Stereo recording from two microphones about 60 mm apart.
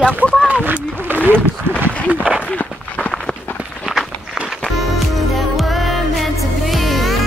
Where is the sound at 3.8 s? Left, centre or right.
Centre.